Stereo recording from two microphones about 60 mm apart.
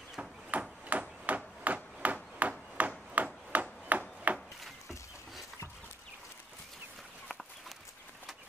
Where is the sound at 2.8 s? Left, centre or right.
Right.